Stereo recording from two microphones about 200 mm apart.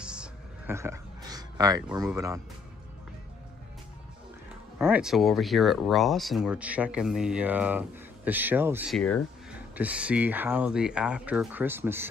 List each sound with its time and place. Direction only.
0.0 s a sound: 5° right (ahead or behind)
2.1 s speech: 15° right (ahead or behind)
4.7 s speech: 5° right (ahead or behind)
8.9 s speech: 5° left (ahead or behind)
9.5 s speech: 5° right (ahead or behind)